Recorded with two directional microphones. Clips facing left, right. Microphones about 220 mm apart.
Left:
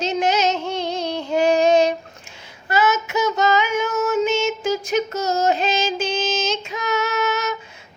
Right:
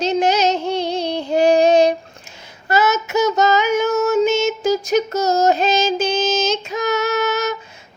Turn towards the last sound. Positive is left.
turn(degrees=-40)  # may be behind; listen again after turning